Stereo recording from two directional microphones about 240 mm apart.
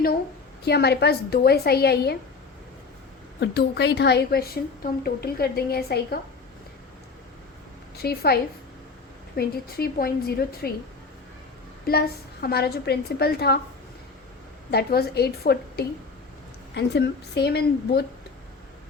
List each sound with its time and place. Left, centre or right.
0.6 s a woman's voice: left
3.4 s a woman's voice: left
8.0 s a woman's voice: left
11.9 s a woman's voice: left
14.7 s a woman's voice: left